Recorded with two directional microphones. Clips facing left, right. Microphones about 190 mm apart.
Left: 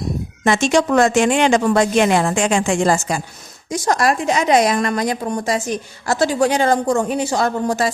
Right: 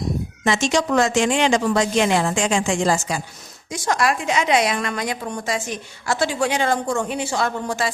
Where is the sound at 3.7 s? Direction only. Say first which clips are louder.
Left 4 dB; 40° left (ahead or behind).